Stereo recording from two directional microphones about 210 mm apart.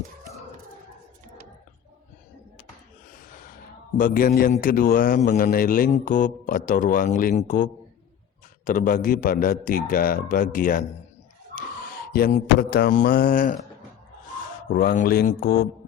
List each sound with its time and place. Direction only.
3.9 s a man's voice: 40° left (ahead or behind)
12.1 s a man's voice: 45° left (ahead or behind)
14.7 s a man's voice: 45° left (ahead or behind)